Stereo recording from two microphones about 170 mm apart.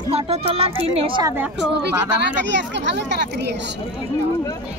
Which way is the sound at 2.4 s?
90° right.